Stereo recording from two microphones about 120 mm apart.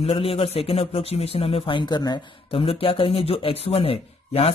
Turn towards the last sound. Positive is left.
turn(degrees=55)  # may be behind; listen again after turning